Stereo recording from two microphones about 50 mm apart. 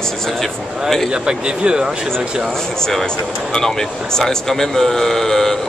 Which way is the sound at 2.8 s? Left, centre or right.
Centre.